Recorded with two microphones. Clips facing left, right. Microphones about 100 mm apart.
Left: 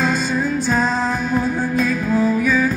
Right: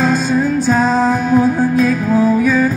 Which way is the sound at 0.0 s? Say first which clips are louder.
Right 5 dB; 40° right (ahead or behind).